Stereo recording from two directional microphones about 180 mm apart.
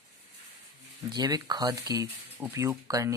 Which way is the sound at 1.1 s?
20° right (ahead or behind).